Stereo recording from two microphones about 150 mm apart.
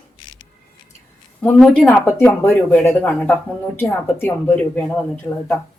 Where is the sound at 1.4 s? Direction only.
10° left (ahead or behind).